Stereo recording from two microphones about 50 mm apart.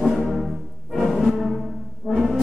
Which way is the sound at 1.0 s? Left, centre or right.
Centre.